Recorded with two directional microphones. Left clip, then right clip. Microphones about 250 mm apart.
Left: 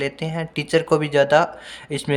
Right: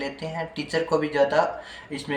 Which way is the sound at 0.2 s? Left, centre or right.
Left.